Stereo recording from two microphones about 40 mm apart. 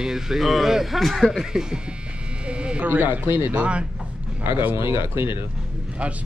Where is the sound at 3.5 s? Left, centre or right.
Right.